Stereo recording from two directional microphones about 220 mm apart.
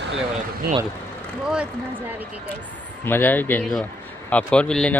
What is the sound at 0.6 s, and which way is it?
Speech, 45° right (ahead or behind).